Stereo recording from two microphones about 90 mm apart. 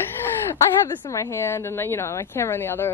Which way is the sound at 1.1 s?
35° left (ahead or behind).